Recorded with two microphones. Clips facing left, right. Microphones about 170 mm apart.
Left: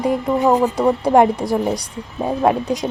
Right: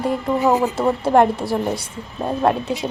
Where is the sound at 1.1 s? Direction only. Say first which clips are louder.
Left 1 dB; 10° left (ahead or behind).